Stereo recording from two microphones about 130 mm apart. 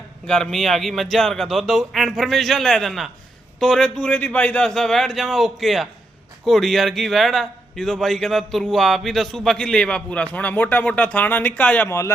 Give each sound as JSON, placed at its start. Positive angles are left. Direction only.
{"t": 0.3, "sound": "a man's voice", "side_deg": 5}
{"t": 11.9, "sound": "speech", "side_deg": 20}